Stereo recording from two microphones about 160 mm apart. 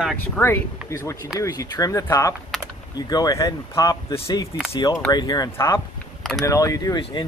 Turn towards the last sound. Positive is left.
turn(degrees=30)  # may be behind; listen again after turning